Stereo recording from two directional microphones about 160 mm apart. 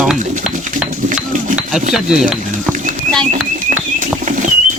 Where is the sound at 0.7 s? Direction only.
50° right (ahead or behind).